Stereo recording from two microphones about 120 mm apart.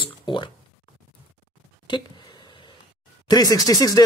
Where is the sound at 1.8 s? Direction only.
40° left (ahead or behind).